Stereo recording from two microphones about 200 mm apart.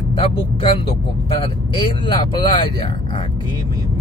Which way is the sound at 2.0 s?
20° left (ahead or behind).